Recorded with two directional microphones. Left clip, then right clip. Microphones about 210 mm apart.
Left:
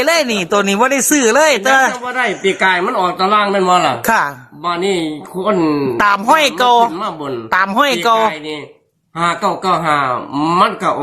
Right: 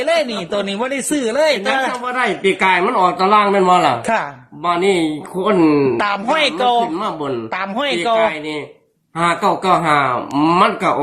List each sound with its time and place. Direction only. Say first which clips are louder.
0.0 s speech: left 3 dB; 30° left (ahead or behind)
1.9 s speech: left 1 dB; centre (ahead or behind)
4.0 s speech: left 5 dB; 25° left (ahead or behind)
4.6 s speech: right 1 dB; 5° left (ahead or behind)
6.0 s speech: left 5 dB; 25° left (ahead or behind)
6.9 s speech: even; centre (ahead or behind)
7.5 s speech: left 10 dB; 25° left (ahead or behind)
8.2 s speech: left 1 dB; 5° left (ahead or behind)